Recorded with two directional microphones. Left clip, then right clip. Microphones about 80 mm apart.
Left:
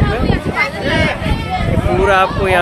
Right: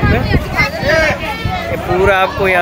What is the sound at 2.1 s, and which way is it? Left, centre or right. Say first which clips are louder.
Speech: even; centre.